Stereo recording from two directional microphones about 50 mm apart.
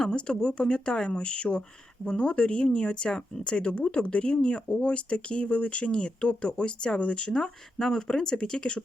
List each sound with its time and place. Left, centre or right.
0.0 s speech: centre